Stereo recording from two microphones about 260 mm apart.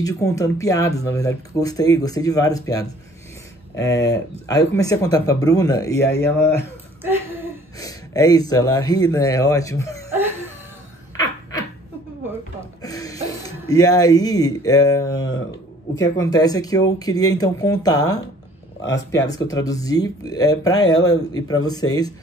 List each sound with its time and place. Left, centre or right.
0.0 s speech: centre
6.0 s speech: left
7.0 s a sound: centre
7.8 s speech: centre
12.8 s speech: centre
18.8 s speech: left
19.1 s speech: centre